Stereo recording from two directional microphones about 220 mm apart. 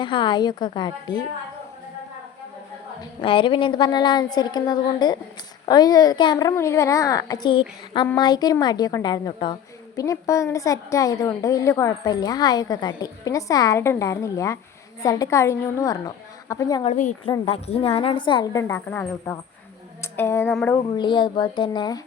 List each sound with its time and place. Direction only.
0.0 s a woman's voice: 20° left (ahead or behind)
3.0 s a woman's voice: 25° left (ahead or behind)
16.8 s a woman's voice: 35° left (ahead or behind); by 20.7 s 10° left (ahead or behind)
20.9 s a woman's voice: 20° left (ahead or behind)